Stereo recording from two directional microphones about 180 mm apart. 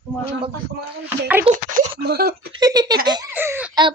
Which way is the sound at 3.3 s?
10° right (ahead or behind).